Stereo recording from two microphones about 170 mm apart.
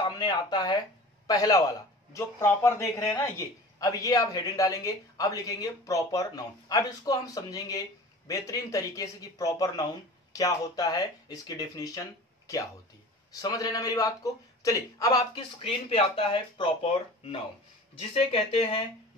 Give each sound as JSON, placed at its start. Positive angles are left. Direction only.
{"t": 0.0, "sound": "a sound", "side_deg": 25}
{"t": 1.2, "sound": "a man's voice", "side_deg": 20}
{"t": 13.4, "sound": "a man's voice", "side_deg": 20}
{"t": 15.6, "sound": "speech", "side_deg": 35}